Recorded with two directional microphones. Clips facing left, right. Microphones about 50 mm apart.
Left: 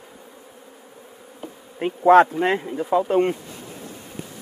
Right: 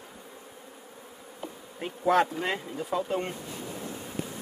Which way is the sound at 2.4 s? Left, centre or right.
Left.